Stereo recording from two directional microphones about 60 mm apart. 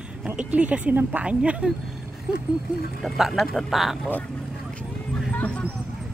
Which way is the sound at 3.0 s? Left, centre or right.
Centre.